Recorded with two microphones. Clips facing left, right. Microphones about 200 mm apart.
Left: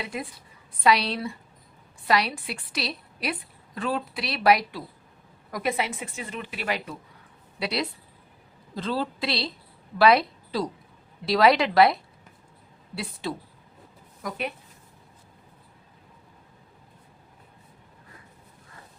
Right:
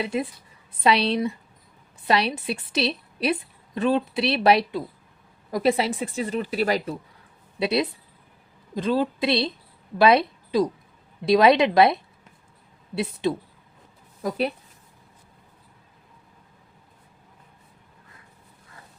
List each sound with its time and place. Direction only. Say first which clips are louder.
0.0 s a woman's voice: right 7 dB; 25° right (ahead or behind)
7.6 s a woman's voice: right 6 dB; 25° right (ahead or behind)
13.2 s a woman's voice: right 7 dB; 20° right (ahead or behind)
14.2 s speech: right 7 dB; 30° right (ahead or behind)